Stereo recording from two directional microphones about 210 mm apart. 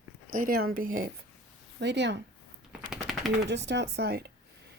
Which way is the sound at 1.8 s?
55° right (ahead or behind).